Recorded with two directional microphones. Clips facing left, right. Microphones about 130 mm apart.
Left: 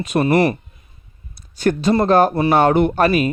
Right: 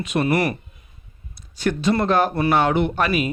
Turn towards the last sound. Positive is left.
turn(degrees=40)  # may be behind; listen again after turning